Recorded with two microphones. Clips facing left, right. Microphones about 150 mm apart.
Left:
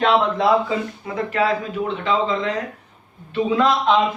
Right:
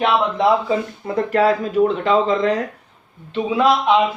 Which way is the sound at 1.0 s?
35° right (ahead or behind).